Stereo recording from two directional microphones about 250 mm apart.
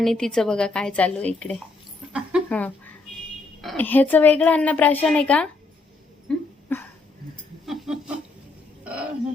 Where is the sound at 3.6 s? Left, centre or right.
Centre.